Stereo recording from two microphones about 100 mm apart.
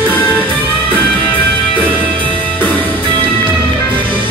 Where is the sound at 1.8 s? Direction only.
15° right (ahead or behind).